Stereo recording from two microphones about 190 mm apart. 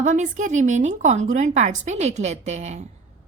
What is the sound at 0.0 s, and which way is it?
A woman's voice, 40° right (ahead or behind).